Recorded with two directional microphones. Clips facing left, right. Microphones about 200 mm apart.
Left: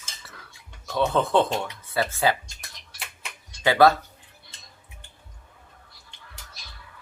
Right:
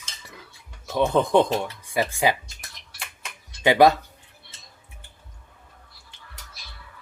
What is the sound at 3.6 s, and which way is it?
Speech, 15° right (ahead or behind).